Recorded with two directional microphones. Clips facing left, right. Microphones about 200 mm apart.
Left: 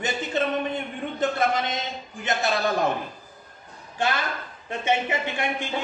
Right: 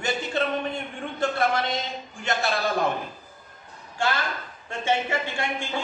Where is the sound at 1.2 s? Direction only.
20° left (ahead or behind).